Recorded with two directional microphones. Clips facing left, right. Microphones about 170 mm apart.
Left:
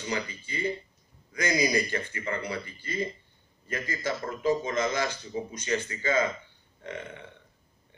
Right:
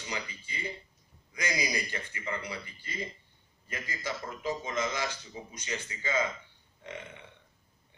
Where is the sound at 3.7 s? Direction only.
40° left (ahead or behind).